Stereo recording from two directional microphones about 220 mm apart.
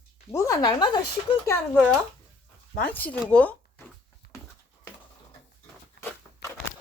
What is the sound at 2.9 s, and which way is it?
Speech, 5° left (ahead or behind).